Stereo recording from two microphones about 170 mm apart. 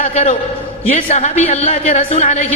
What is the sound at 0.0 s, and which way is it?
A man's voice, 40° left (ahead or behind).